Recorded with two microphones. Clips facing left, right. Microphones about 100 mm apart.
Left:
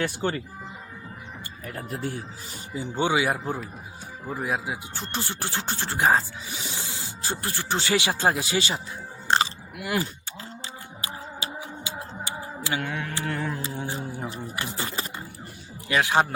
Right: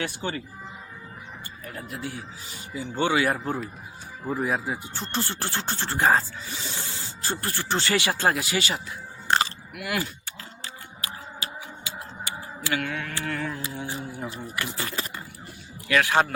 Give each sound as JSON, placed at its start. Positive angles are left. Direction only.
{"t": 0.0, "sound": "speech", "side_deg": 45}
{"t": 1.6, "sound": "speech", "side_deg": 45}
{"t": 2.7, "sound": "speech", "side_deg": 15}
{"t": 9.3, "sound": "biting", "side_deg": 25}
{"t": 10.6, "sound": "music", "side_deg": 20}
{"t": 14.5, "sound": "speech", "side_deg": 30}